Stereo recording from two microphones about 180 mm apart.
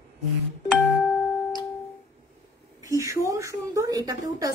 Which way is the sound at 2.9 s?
15° right (ahead or behind).